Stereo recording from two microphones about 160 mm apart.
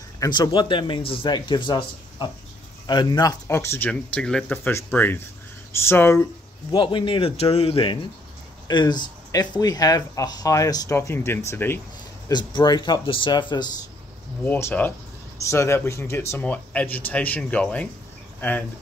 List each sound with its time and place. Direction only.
0.2 s speech: 30° left (ahead or behind)
6.7 s a man's voice: 30° left (ahead or behind); by 11.8 s 15° left (ahead or behind)
12.3 s speech: 25° left (ahead or behind)
14.4 s speech: 10° left (ahead or behind)